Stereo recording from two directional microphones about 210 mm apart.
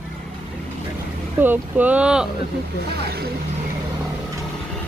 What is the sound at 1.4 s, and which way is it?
Speech, 10° right (ahead or behind).